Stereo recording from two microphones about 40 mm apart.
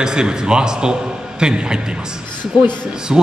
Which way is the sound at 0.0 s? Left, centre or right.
Centre.